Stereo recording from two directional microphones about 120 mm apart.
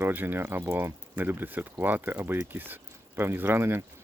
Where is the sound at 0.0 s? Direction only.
15° right (ahead or behind).